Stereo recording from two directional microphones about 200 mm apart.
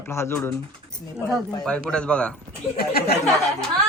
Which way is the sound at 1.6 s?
5° left (ahead or behind).